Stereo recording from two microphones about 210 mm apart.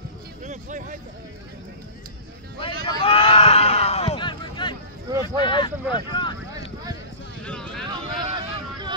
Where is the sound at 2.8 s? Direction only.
25° left (ahead or behind).